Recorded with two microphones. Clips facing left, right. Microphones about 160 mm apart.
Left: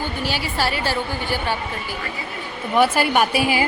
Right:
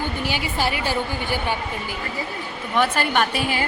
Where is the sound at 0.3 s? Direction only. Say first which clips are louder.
Left 1 dB; 15° right (ahead or behind).